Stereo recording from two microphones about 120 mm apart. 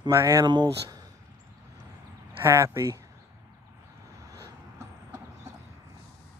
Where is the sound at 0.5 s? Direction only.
35° right (ahead or behind).